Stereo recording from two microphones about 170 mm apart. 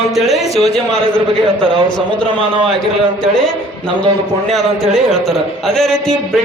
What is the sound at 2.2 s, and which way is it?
Speech, 30° right (ahead or behind).